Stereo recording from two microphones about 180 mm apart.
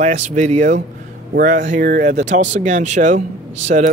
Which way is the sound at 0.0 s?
40° right (ahead or behind).